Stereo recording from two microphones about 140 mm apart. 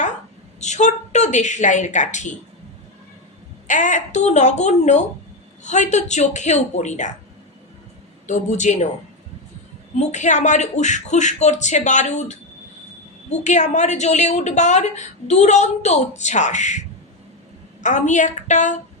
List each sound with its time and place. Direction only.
0.6 s a woman's voice: 55° left (ahead or behind)
3.7 s a woman's voice: 60° left (ahead or behind)
8.3 s a woman's voice: 60° left (ahead or behind)
9.9 s a woman's voice: 55° left (ahead or behind)